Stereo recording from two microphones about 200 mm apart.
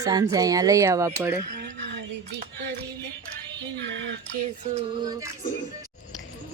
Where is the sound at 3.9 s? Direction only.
65° right (ahead or behind).